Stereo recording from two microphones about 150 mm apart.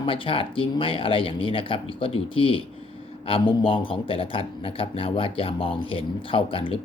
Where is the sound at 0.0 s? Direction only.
35° left (ahead or behind).